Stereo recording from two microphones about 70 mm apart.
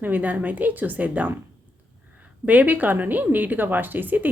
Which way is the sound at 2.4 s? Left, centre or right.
Right.